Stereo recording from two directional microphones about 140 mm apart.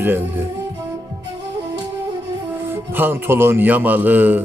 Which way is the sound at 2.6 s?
15° right (ahead or behind).